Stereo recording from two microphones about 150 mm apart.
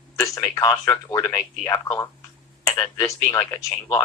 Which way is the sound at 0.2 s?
20° left (ahead or behind).